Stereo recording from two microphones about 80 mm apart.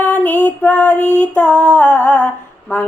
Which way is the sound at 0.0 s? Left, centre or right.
Centre.